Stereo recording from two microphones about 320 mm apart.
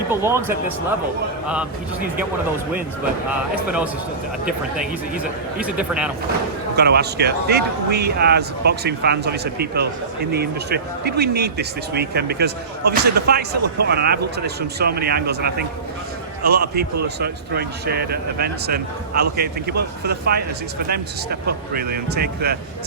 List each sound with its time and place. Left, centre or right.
0.1 s speech: centre
5.1 s speech: centre
6.7 s speech: right